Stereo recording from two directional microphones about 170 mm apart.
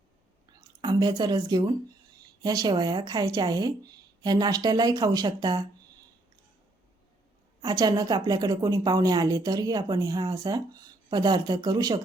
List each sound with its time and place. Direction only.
0.8 s a woman's voice: 25° right (ahead or behind)
7.6 s a woman's voice: 25° right (ahead or behind)